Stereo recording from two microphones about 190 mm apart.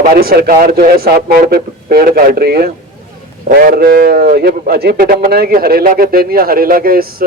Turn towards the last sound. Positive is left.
turn(degrees=-50)  # may be behind; listen again after turning